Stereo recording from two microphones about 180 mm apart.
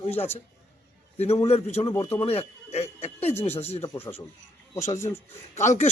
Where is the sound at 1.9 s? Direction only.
15° left (ahead or behind).